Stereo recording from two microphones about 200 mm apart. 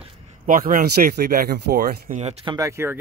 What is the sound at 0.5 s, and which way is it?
Speech, 45° right (ahead or behind).